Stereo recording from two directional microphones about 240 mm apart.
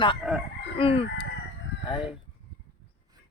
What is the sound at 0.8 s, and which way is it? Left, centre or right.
Chicken, left.